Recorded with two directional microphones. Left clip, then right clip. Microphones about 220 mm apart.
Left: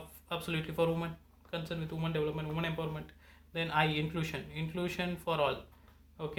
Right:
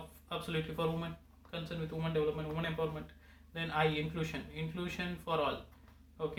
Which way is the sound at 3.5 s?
45° left (ahead or behind).